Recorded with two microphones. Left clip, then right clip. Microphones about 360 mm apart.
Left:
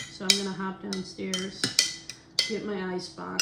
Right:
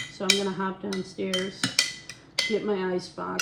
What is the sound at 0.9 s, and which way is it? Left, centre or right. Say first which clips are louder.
Dishes: right 4 dB; centre.